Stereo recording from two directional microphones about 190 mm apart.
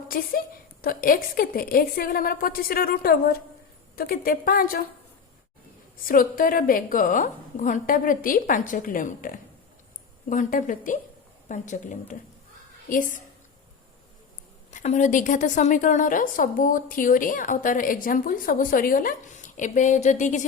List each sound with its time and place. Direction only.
0.1 s a woman's voice: 50° left (ahead or behind)
6.1 s a woman's voice: 45° left (ahead or behind)
14.7 s a woman's voice: 40° left (ahead or behind)